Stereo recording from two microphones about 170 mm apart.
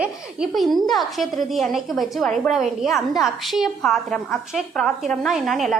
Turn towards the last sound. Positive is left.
turn(degrees=0)  # may be behind; listen again after turning